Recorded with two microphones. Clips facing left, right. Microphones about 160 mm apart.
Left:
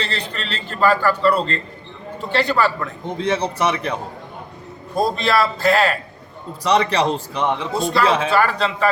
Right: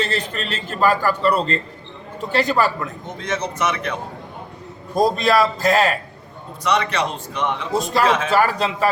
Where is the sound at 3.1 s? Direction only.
30° left (ahead or behind).